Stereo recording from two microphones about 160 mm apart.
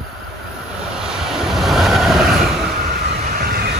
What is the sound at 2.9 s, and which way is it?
Vehicle, 75° right (ahead or behind).